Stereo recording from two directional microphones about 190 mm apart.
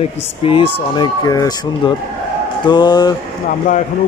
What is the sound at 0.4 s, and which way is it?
Speech, 30° left (ahead or behind).